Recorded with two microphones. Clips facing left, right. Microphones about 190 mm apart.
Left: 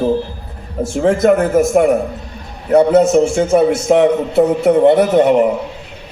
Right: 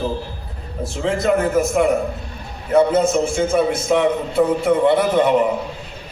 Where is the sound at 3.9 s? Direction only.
65° left (ahead or behind).